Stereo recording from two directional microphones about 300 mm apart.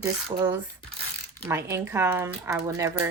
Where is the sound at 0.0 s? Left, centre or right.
Centre.